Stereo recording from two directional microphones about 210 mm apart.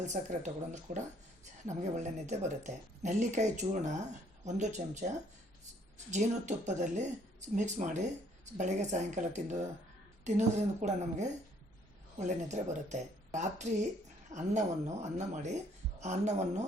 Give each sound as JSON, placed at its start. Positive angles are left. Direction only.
{"t": 0.0, "sound": "speech", "side_deg": -35}
{"t": 16.0, "sound": "speech", "side_deg": -35}